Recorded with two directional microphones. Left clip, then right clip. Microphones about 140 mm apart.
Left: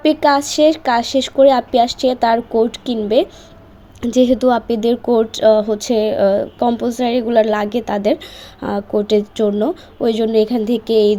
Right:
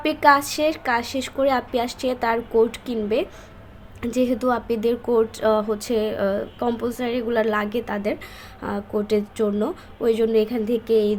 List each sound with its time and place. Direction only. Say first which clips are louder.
0.0 s speech: left 3 dB; 25° left (ahead or behind)